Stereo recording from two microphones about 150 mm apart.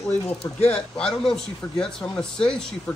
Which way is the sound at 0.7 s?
5° left (ahead or behind).